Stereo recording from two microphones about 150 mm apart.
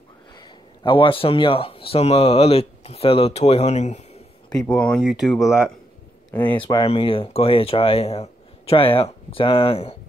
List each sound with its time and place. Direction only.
0.3 s speech: 30° left (ahead or behind); by 4.2 s 50° left (ahead or behind)
4.6 s speech: 5° left (ahead or behind)
6.7 s speech: 35° left (ahead or behind)